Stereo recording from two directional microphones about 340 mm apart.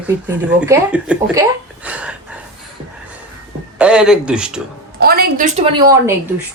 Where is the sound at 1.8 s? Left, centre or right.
Centre.